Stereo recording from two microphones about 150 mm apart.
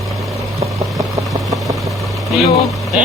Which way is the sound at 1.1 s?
25° right (ahead or behind).